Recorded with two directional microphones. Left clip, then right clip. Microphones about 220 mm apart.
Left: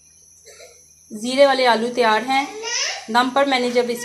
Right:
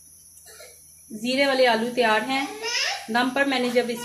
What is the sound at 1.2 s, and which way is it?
Speech, 10° left (ahead or behind).